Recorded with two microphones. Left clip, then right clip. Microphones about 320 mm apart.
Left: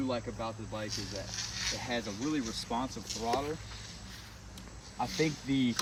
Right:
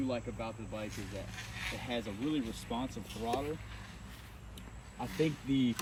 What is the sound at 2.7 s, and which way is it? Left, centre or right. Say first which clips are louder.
Speech: left 5 dB; centre.